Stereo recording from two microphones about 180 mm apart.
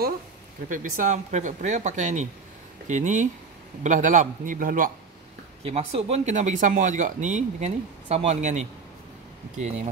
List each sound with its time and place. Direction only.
0.7 s speech: 45° right (ahead or behind)
5.6 s speech: 35° right (ahead or behind)